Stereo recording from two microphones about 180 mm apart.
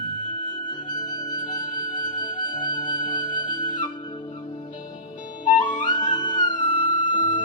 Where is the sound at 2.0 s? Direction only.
25° left (ahead or behind).